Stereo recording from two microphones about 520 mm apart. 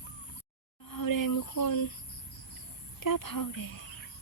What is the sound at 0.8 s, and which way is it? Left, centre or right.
Speech, left.